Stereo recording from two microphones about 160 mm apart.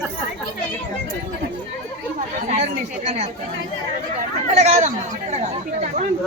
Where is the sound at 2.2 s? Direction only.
40° right (ahead or behind).